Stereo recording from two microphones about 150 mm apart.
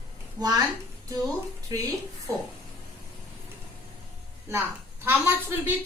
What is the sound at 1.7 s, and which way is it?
Speech, 25° right (ahead or behind).